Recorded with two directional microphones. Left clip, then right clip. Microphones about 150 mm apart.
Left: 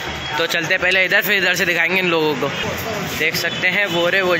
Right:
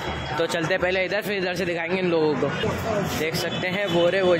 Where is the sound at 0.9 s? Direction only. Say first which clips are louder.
Left 9 dB; 5° right (ahead or behind).